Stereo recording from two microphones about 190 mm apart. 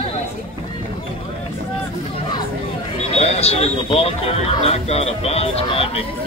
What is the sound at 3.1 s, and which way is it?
Speech, 30° left (ahead or behind).